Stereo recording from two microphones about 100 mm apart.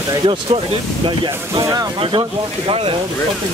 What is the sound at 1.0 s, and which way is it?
Speech, 55° right (ahead or behind).